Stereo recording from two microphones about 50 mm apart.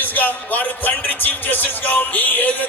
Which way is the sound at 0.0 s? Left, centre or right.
Left.